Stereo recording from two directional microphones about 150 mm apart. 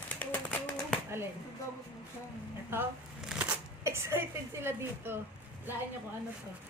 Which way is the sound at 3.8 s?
15° right (ahead or behind).